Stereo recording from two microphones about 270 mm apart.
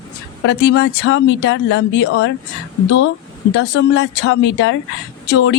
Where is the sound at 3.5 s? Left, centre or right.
Left.